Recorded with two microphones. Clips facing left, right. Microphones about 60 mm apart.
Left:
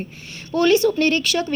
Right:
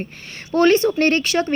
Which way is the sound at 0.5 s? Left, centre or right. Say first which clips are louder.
Right 1 dB; right.